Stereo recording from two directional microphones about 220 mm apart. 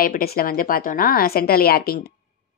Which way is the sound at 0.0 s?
40° left (ahead or behind).